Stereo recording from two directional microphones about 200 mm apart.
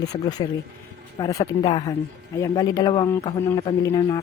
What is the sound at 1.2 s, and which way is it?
A woman's voice, 15° left (ahead or behind).